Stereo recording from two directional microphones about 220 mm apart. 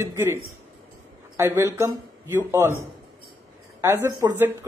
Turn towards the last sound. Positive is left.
turn(degrees=-10)  # may be behind; listen again after turning